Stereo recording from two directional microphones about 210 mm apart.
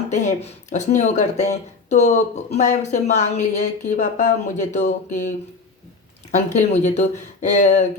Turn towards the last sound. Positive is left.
turn(degrees=35)  # may be behind; listen again after turning